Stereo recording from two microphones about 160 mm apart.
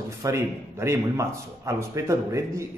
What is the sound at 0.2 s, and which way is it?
Speech, 15° right (ahead or behind).